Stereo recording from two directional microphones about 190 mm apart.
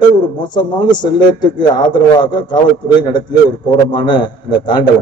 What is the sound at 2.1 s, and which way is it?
A man's voice, 25° left (ahead or behind).